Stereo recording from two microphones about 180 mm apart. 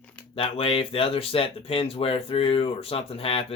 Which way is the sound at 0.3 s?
30° left (ahead or behind).